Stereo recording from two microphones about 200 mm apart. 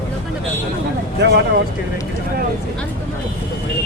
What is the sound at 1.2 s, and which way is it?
Speech, 60° right (ahead or behind).